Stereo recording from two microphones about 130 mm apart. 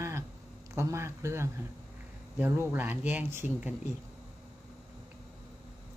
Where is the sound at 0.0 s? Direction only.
20° right (ahead or behind).